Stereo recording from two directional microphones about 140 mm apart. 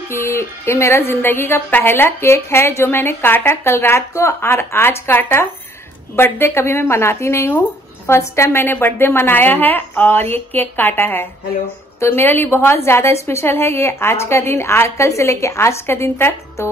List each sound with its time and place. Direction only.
0.1 s a woman's voice: 20° left (ahead or behind)